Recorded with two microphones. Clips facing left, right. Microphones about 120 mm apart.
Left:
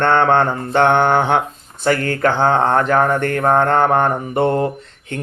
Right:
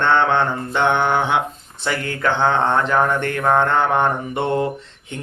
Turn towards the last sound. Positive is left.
turn(degrees=40)  # may be behind; listen again after turning